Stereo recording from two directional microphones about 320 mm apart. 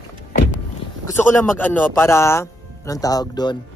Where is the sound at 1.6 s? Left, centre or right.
Centre.